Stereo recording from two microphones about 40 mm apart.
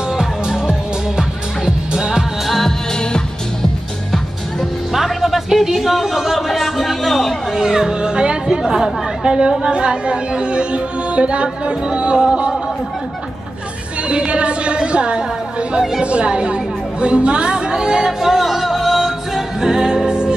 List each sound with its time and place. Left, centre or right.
0.1 s music: centre
2.4 s music: centre
2.9 s music: centre
4.9 s a sound: centre
7.6 s speech: centre
14.0 s speech: right
16.0 s chatter: right